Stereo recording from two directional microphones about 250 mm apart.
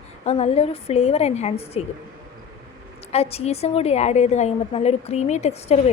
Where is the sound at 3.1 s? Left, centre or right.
Left.